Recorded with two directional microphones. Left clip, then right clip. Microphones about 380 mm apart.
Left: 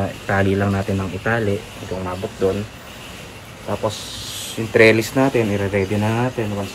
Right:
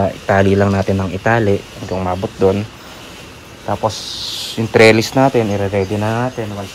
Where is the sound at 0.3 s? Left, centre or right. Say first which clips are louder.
Right 6 dB; centre.